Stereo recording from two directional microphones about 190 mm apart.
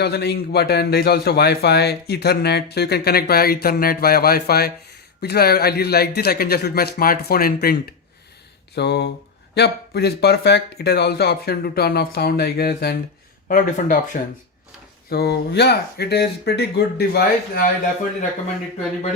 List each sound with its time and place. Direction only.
0.0 s speech: 60° left (ahead or behind)
13.5 s speech: 45° left (ahead or behind)
15.1 s speech: 60° left (ahead or behind)